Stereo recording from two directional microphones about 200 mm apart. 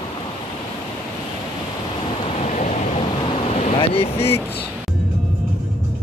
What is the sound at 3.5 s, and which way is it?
Vehicle, 30° left (ahead or behind).